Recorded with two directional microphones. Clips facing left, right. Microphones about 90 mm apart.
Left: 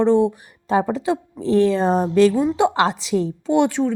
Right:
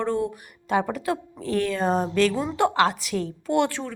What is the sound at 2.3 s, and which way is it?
Speech, 15° left (ahead or behind).